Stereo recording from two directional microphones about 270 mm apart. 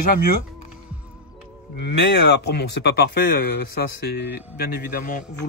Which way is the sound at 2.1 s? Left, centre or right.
Left.